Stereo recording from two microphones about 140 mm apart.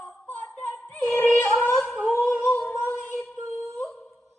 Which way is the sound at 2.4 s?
15° left (ahead or behind).